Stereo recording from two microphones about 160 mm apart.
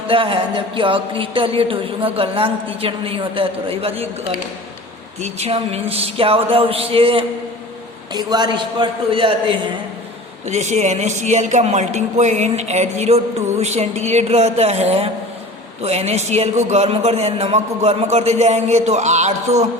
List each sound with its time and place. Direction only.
0.1 s speech: 35° right (ahead or behind)
5.2 s a man's voice: 40° right (ahead or behind)
10.4 s a man's voice: 45° right (ahead or behind)